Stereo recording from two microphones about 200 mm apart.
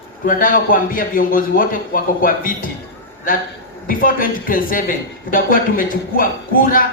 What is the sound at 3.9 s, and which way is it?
Speech, 45° left (ahead or behind).